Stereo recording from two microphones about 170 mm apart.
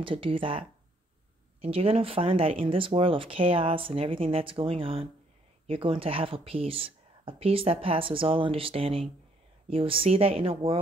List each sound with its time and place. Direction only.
0.0 s speech: 30° right (ahead or behind)